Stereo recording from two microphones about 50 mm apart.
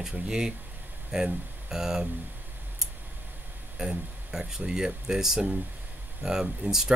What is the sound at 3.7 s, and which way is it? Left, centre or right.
Speech, centre.